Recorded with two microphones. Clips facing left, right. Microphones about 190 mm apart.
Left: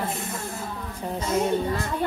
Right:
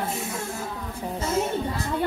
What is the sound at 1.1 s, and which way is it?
Speech, 10° right (ahead or behind).